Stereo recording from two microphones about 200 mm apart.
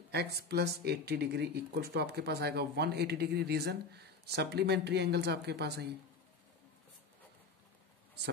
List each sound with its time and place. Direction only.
0.1 s speech: 55° right (ahead or behind)